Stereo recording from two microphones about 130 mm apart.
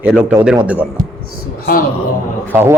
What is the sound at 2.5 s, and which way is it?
Speech, 15° right (ahead or behind).